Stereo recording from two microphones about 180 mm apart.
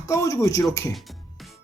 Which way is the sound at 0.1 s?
20° left (ahead or behind).